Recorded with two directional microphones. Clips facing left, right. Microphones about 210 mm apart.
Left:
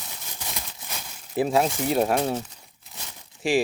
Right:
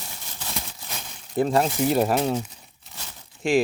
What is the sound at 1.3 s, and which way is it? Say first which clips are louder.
Speech: right 1 dB; 5° left (ahead or behind).